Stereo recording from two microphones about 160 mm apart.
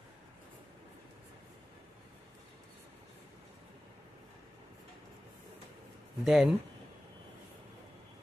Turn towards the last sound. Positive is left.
turn(degrees=0)  # may be behind; listen again after turning